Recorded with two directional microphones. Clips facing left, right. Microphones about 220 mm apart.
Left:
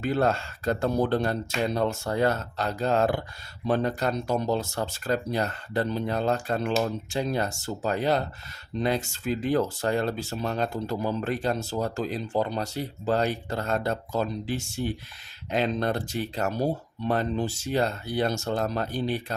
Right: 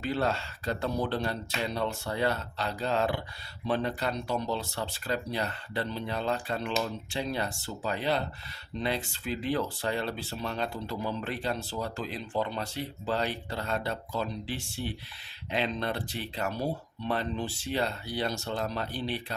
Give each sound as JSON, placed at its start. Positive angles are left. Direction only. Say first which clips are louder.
{"t": 0.0, "sound": "speech", "louder": "left 5 dB", "side_deg": 50}